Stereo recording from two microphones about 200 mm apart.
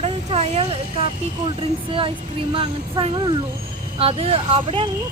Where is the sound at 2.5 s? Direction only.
25° right (ahead or behind).